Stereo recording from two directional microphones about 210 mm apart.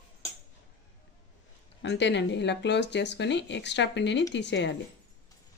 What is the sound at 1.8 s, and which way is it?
Speech, 55° left (ahead or behind).